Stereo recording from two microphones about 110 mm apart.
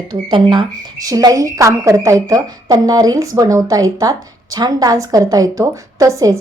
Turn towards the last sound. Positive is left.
turn(degrees=-30)  # may be behind; listen again after turning